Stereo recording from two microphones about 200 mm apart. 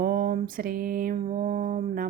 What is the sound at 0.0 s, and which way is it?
Speech, 45° right (ahead or behind).